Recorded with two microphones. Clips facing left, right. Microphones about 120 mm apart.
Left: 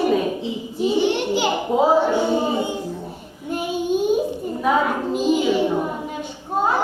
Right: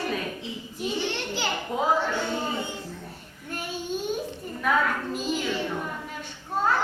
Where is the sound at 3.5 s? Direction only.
15° left (ahead or behind).